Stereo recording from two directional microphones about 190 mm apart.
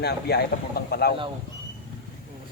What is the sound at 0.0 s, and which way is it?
Speech, 60° left (ahead or behind).